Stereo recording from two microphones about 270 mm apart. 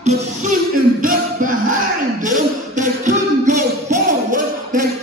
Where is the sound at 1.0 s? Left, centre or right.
Right.